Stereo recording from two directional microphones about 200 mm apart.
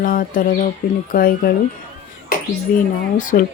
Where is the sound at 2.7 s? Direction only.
45° left (ahead or behind).